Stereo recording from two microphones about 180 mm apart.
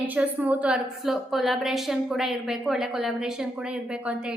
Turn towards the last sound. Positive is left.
turn(degrees=0)  # may be behind; listen again after turning